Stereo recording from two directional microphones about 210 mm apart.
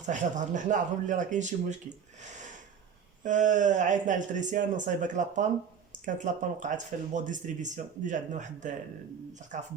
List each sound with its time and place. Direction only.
0.0 s speech: 35° right (ahead or behind)
3.2 s speech: 35° right (ahead or behind)